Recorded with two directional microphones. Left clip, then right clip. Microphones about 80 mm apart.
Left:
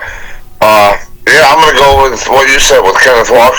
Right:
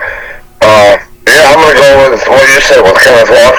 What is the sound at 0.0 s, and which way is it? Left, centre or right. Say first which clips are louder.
Radio: right 6 dB; left.